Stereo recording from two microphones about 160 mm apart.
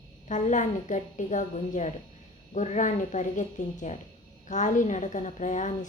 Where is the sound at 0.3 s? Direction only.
50° left (ahead or behind).